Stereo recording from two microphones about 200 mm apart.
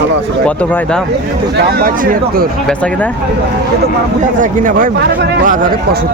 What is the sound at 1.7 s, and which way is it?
Speech, 45° right (ahead or behind).